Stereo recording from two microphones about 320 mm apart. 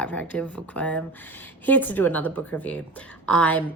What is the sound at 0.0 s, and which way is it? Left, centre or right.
Speech, centre.